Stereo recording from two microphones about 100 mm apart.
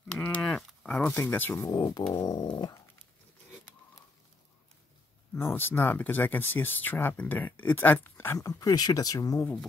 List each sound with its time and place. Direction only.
0.1 s a sound: 15° left (ahead or behind)
1.8 s speech: 40° left (ahead or behind)
2.1 s dog: 45° left (ahead or behind)
5.3 s speech: 20° left (ahead or behind)
8.4 s speech: 35° left (ahead or behind)